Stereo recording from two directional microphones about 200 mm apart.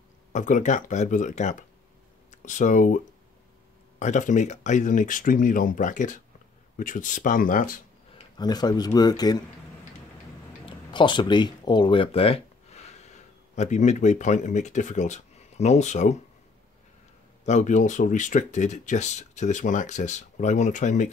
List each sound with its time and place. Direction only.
0.3 s speech: 40° left (ahead or behind)
4.0 s speech: 40° left (ahead or behind)
8.2 s speech: 20° left (ahead or behind)
10.6 s speech: 25° left (ahead or behind)
17.5 s speech: 40° left (ahead or behind)